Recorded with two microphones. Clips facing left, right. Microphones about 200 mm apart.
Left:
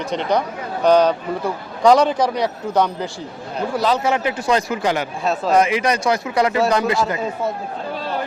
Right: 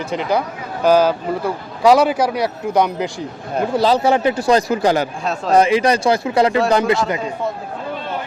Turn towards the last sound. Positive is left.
turn(degrees=-25)  # may be behind; listen again after turning